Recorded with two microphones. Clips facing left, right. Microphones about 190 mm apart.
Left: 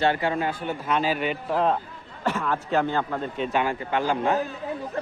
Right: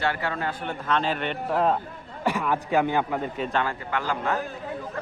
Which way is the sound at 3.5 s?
15° left (ahead or behind).